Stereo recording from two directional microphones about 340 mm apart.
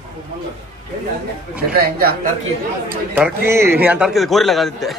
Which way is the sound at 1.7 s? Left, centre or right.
Right.